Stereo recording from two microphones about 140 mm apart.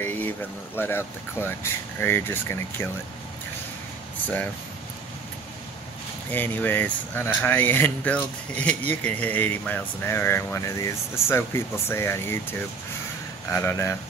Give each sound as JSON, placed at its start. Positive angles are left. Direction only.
{"t": 0.0, "sound": "a sound", "side_deg": 15}
{"t": 0.7, "sound": "speech", "side_deg": 15}
{"t": 6.3, "sound": "speech", "side_deg": 15}